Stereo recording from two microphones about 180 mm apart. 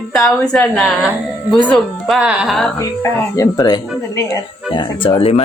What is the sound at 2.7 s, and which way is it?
Speech, 15° left (ahead or behind).